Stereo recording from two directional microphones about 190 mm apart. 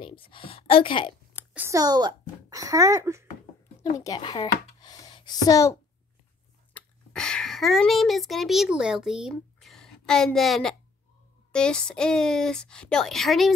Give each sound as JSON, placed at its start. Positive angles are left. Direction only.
{"t": 0.0, "sound": "a woman's voice", "side_deg": 25}
{"t": 1.5, "sound": "a child's voice", "side_deg": -15}
{"t": 4.0, "sound": "speech", "side_deg": 20}
{"t": 6.7, "sound": "a child's voice", "side_deg": 5}